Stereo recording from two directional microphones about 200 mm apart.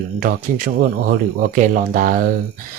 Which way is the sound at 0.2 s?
45° right (ahead or behind).